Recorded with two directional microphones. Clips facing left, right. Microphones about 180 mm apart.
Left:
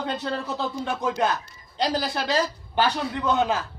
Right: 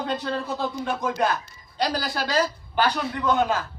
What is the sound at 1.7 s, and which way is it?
A man's voice, 25° left (ahead or behind).